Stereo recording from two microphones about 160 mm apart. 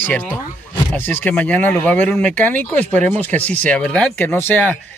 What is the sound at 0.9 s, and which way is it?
Speech, 10° left (ahead or behind).